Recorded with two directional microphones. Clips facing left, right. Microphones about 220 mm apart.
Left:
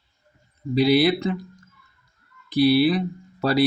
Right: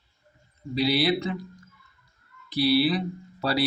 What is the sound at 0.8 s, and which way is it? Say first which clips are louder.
Speech: left 6 dB; 50° left (ahead or behind).